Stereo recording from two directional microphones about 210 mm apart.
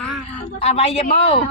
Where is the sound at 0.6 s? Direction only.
30° left (ahead or behind).